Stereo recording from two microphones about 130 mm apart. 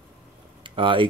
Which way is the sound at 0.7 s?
40° right (ahead or behind).